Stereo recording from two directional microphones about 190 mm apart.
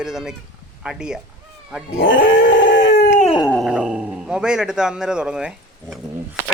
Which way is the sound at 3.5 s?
Centre (ahead or behind).